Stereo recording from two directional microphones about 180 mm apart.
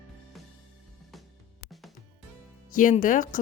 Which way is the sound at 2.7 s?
45° left (ahead or behind).